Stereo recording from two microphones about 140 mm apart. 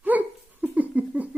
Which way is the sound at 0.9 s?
10° right (ahead or behind).